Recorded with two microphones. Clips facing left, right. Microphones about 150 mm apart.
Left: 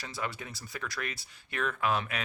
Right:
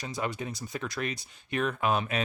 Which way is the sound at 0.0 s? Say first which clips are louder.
Right 5 dB; 20° right (ahead or behind).